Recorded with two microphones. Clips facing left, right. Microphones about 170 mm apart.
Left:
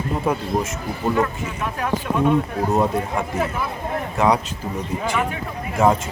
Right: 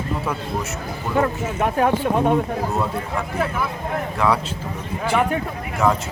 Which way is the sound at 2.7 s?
25° left (ahead or behind).